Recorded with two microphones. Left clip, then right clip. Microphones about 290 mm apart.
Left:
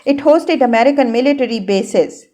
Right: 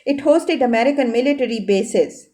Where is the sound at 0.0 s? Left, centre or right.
Centre.